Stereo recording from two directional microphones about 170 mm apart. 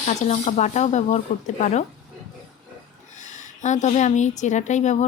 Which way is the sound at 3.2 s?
45° left (ahead or behind).